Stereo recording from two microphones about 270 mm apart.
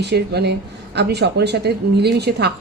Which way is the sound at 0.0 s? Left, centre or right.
Right.